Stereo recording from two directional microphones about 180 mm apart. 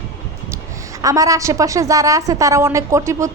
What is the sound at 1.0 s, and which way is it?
A woman's voice, 20° right (ahead or behind).